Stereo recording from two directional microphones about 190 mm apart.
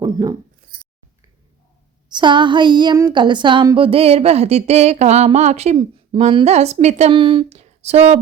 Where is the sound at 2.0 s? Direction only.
25° right (ahead or behind).